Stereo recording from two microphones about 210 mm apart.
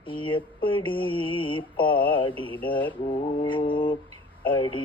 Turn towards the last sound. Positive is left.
turn(degrees=25)  # may be behind; listen again after turning